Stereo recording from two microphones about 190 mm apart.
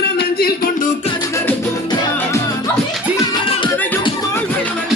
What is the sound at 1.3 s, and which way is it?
Music, 15° left (ahead or behind).